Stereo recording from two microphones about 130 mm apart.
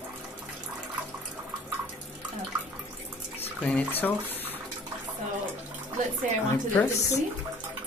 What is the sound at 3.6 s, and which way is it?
Speech, 10° left (ahead or behind).